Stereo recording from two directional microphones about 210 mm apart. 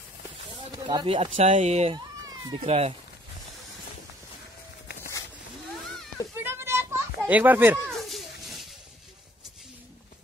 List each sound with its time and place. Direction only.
0.8 s speech: 25° right (ahead or behind)
6.4 s children playing: 10° right (ahead or behind)